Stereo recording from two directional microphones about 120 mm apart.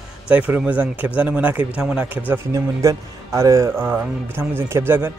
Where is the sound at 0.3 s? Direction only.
10° right (ahead or behind).